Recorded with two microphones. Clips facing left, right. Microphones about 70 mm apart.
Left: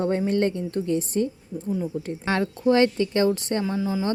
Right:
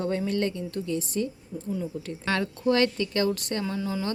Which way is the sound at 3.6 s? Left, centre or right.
Centre.